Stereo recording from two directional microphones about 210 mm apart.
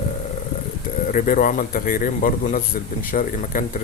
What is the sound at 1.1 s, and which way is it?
A man's voice, 40° left (ahead or behind).